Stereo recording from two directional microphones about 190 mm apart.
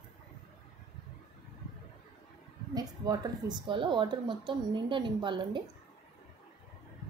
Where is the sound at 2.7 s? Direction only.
20° right (ahead or behind).